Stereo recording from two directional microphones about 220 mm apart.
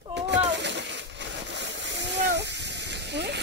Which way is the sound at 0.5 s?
55° right (ahead or behind).